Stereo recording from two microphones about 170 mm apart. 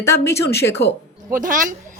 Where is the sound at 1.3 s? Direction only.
50° right (ahead or behind).